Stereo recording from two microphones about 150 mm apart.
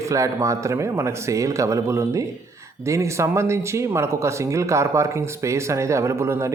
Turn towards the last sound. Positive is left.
turn(degrees=-20)  # may be behind; listen again after turning